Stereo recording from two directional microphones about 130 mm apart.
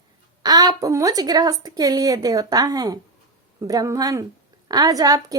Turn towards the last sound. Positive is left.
turn(degrees=-30)  # may be behind; listen again after turning